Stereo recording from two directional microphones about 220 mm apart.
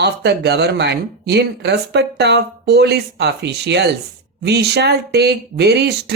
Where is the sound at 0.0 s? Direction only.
50° right (ahead or behind).